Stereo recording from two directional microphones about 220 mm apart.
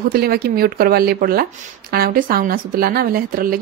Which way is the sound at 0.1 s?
45° right (ahead or behind).